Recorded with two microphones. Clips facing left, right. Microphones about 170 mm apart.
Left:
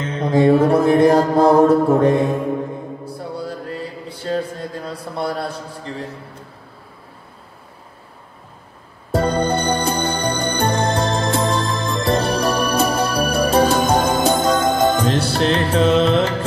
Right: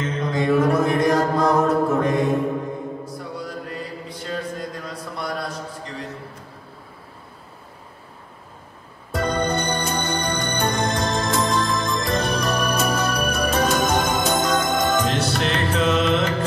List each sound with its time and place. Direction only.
0.2 s mantra: 30° left (ahead or behind)
9.1 s music: 30° left (ahead or behind)